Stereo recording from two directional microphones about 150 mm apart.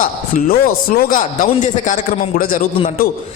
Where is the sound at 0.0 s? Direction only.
70° left (ahead or behind).